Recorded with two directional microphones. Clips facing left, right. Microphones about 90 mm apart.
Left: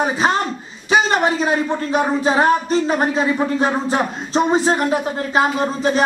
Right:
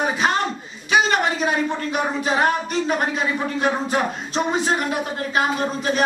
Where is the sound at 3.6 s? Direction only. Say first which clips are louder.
Left 2 dB; 30° left (ahead or behind).